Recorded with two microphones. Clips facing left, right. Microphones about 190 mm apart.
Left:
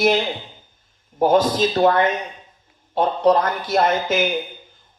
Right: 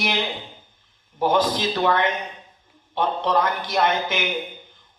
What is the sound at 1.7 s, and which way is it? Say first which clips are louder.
A man's voice: left 5 dB; 40° left (ahead or behind).